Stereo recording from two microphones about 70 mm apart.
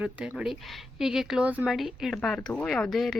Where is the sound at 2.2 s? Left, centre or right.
Centre.